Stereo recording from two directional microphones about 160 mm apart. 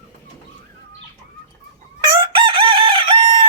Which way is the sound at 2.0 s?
30° right (ahead or behind).